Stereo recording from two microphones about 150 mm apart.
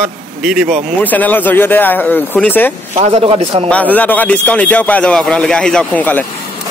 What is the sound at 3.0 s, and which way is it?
Speech, 40° right (ahead or behind).